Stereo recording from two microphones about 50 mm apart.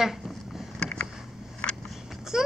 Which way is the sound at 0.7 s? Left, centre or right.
Centre.